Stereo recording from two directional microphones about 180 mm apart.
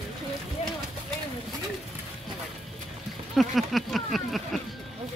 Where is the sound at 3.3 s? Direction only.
Centre (ahead or behind).